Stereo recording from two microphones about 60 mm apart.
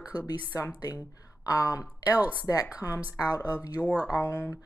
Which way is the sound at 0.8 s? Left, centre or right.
Left.